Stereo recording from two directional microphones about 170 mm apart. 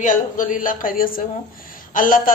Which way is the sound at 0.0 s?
50° left (ahead or behind).